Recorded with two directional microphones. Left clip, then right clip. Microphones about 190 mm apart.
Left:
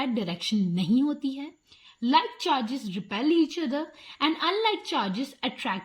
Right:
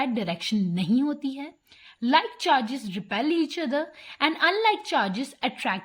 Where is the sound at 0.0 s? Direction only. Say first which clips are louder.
Right 2 dB; 20° right (ahead or behind).